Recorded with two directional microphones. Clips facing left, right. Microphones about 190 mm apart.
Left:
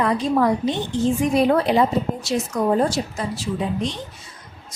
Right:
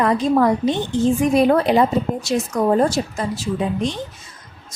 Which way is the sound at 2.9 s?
45° right (ahead or behind).